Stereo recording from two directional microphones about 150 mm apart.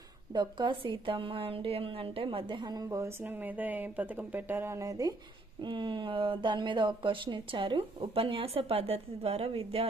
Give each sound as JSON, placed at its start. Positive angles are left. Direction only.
{"t": 0.3, "sound": "a woman's voice", "side_deg": -30}